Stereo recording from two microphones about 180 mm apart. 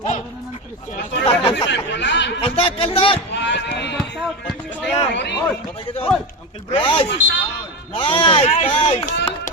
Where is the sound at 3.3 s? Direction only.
75° left (ahead or behind).